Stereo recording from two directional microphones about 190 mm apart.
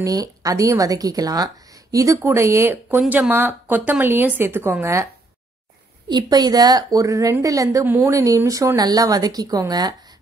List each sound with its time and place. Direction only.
0.0 s speech: 20° right (ahead or behind)
6.0 s a woman's voice: 20° right (ahead or behind)